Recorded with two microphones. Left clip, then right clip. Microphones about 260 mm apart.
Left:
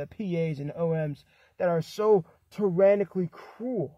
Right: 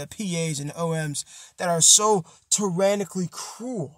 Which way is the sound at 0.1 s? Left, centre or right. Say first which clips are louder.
Right 3 dB; right.